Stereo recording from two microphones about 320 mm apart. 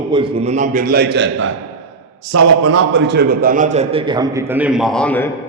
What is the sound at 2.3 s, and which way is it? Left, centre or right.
A man's voice, right.